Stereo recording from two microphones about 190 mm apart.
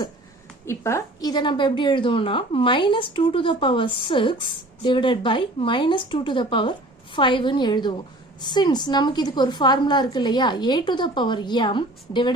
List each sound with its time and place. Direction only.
0.6 s a woman's voice: 15° left (ahead or behind)